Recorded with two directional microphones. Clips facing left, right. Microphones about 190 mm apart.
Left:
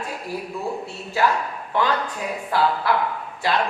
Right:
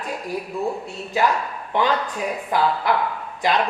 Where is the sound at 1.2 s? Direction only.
15° right (ahead or behind).